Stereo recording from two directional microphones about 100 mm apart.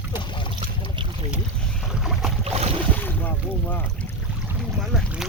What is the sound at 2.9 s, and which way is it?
Boat, 20° left (ahead or behind).